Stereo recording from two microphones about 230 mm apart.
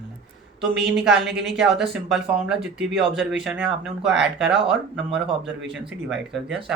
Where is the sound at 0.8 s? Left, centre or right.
Right.